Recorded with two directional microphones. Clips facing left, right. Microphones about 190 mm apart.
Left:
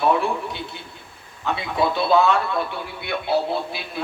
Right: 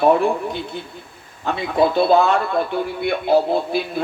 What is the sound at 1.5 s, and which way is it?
Speech, 50° right (ahead or behind).